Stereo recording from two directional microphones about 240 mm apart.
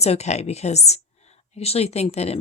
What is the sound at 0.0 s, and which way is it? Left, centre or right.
A woman's voice, left.